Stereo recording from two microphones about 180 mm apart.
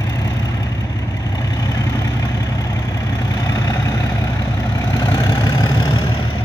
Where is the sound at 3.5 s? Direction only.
20° left (ahead or behind).